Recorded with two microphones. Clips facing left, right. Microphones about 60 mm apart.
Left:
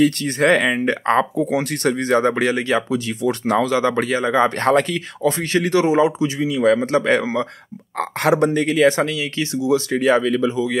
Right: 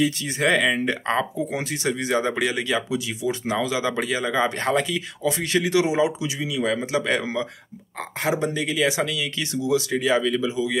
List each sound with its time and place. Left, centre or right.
0.0 s speech: left
1.3 s speech: left
4.6 s speech: left
8.0 s speech: left
8.5 s speech: left